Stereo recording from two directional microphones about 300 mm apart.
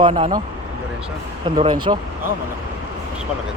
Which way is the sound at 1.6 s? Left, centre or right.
Centre.